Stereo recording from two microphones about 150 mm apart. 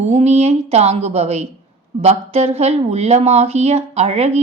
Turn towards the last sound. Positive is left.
turn(degrees=-45)  # may be behind; listen again after turning